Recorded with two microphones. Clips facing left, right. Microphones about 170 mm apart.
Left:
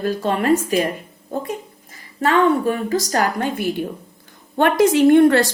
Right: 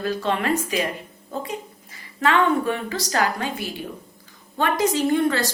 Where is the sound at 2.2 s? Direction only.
40° left (ahead or behind).